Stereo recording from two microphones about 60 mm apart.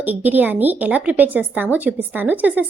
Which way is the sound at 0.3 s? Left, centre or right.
Right.